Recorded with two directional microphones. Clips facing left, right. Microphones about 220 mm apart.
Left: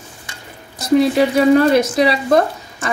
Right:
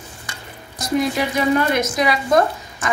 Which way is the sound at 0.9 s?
30° left (ahead or behind).